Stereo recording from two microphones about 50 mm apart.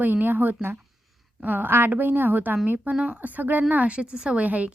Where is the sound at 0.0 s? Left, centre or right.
Right.